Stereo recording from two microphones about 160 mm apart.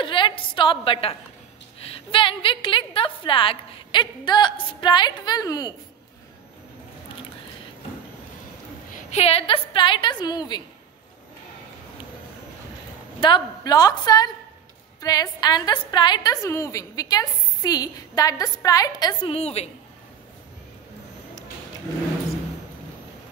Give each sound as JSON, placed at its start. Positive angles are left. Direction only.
{"t": 0.0, "sound": "a sound", "side_deg": 30}
{"t": 1.8, "sound": "a woman's voice", "side_deg": 35}
{"t": 8.9, "sound": "a woman's voice", "side_deg": 40}
{"t": 13.2, "sound": "a woman's voice", "side_deg": 25}